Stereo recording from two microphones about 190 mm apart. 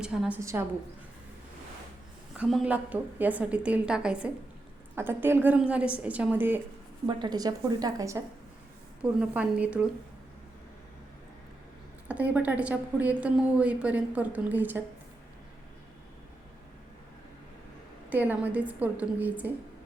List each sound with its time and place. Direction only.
0.0 s a woman's voice: 5° right (ahead or behind)
2.3 s a woman's voice: 5° right (ahead or behind)
7.1 s a woman's voice: 20° right (ahead or behind)
9.0 s a woman's voice: 5° right (ahead or behind)
12.0 s a woman's voice: 5° right (ahead or behind)
18.1 s a woman's voice: 10° right (ahead or behind)